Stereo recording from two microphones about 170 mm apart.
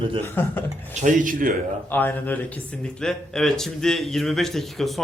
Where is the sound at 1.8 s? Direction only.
10° left (ahead or behind).